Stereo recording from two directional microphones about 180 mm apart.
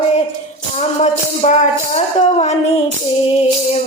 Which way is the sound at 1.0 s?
40° left (ahead or behind).